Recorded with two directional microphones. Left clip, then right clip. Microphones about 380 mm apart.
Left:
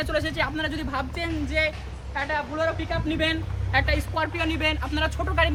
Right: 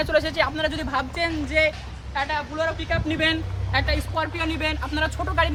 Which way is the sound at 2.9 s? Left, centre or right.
Right.